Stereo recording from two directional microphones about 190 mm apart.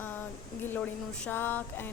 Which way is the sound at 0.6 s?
10° left (ahead or behind).